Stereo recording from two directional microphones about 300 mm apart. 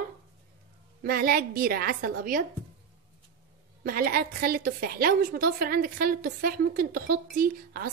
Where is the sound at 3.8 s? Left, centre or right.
Right.